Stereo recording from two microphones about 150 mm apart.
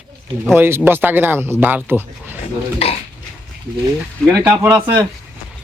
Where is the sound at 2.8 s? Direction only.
40° left (ahead or behind).